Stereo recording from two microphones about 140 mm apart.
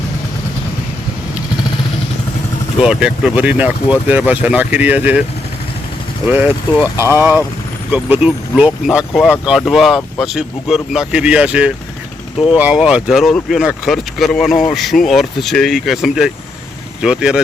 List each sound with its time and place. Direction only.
2.7 s speech: 5° right (ahead or behind)
6.2 s speech: 10° right (ahead or behind)